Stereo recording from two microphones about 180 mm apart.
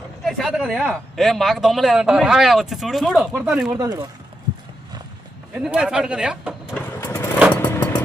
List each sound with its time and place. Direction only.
0.3 s speech: centre (ahead or behind)
3.8 s speech: 20° right (ahead or behind)
5.5 s speech: 5° right (ahead or behind)
7.0 s vehicle: 15° left (ahead or behind)